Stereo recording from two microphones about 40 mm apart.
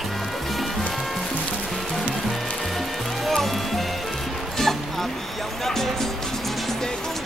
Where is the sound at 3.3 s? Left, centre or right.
Centre.